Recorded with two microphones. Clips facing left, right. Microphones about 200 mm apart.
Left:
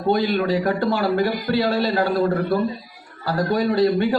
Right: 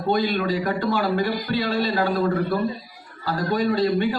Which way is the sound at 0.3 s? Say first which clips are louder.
Left 3 dB; 50° left (ahead or behind).